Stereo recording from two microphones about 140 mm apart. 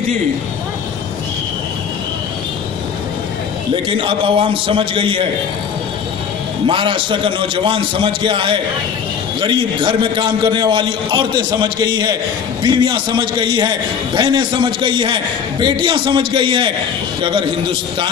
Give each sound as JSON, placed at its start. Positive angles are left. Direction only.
{"t": 3.8, "sound": "a man's voice", "side_deg": -40}
{"t": 6.7, "sound": "a man's voice", "side_deg": -35}